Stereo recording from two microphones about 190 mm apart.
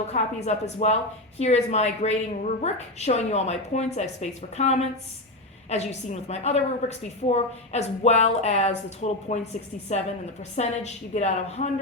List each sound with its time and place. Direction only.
0.1 s a woman's voice: 35° left (ahead or behind)
10.5 s a woman's voice: 35° left (ahead or behind)